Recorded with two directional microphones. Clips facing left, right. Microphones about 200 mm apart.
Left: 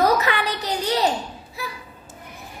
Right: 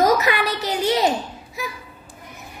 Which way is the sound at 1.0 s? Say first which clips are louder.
Right 2 dB; 15° right (ahead or behind).